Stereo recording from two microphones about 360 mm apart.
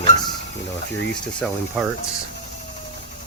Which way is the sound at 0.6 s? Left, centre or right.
Left.